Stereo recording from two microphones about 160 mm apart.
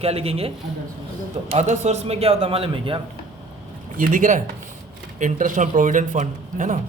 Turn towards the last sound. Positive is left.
turn(degrees=-50)  # may be behind; listen again after turning